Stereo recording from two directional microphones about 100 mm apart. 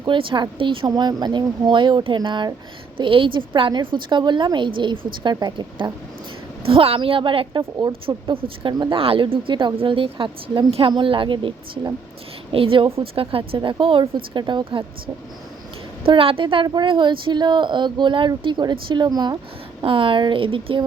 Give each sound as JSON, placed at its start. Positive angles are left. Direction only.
{"t": 0.0, "sound": "a woman's voice", "side_deg": -55}
{"t": 0.9, "sound": "a woman's voice", "side_deg": -45}
{"t": 6.7, "sound": "a woman's voice", "side_deg": -70}
{"t": 13.6, "sound": "a woman's voice", "side_deg": -55}
{"t": 16.0, "sound": "a woman's voice", "side_deg": -65}
{"t": 16.6, "sound": "a woman's voice", "side_deg": -50}
{"t": 19.8, "sound": "a woman's voice", "side_deg": -60}